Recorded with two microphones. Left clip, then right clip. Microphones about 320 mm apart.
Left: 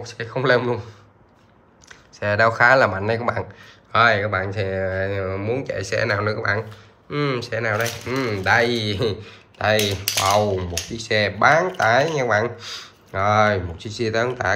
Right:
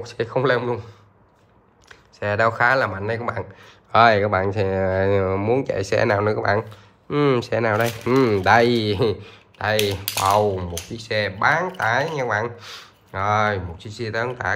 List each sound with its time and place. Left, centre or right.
0.0 s speech: centre